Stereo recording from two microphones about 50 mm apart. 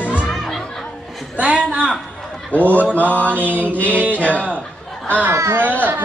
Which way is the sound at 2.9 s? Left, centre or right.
Left.